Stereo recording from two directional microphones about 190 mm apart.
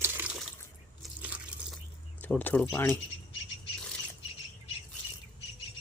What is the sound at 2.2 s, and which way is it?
Speech, 10° left (ahead or behind).